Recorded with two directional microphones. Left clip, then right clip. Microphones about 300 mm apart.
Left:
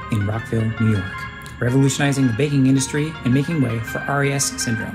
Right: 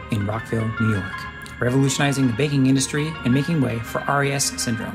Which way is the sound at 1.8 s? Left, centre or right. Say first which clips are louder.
Left 1 dB; centre.